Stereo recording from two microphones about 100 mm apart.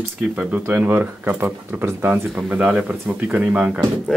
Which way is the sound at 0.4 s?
10° right (ahead or behind).